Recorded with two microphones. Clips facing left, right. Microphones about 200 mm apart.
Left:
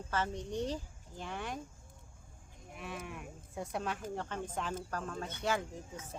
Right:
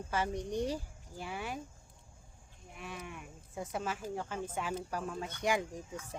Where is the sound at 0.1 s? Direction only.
10° right (ahead or behind).